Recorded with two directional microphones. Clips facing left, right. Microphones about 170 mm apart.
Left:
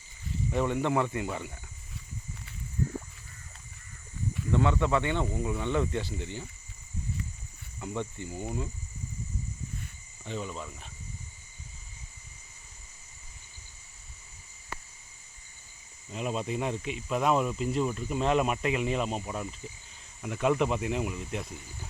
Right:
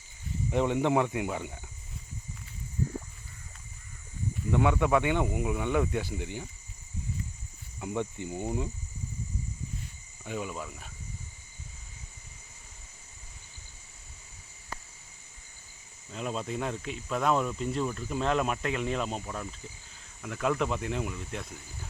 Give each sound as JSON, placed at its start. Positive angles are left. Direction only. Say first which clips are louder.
{"t": 0.5, "sound": "speech", "louder": "right 2 dB", "side_deg": -15}
{"t": 4.5, "sound": "speech", "louder": "right 1 dB", "side_deg": -10}
{"t": 7.8, "sound": "speech", "louder": "right 2 dB", "side_deg": -15}
{"t": 10.2, "sound": "speech", "louder": "right 1 dB", "side_deg": -10}
{"t": 16.1, "sound": "speech", "louder": "left 2 dB", "side_deg": 5}